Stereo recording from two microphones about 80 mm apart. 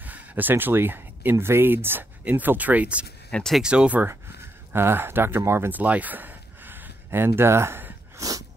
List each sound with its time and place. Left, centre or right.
0.0 s speech: right
3.3 s speech: centre
3.6 s speech: centre
4.7 s speech: right
5.8 s a sound: centre
8.2 s dog: right